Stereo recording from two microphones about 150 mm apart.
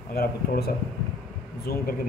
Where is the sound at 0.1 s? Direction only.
90° left.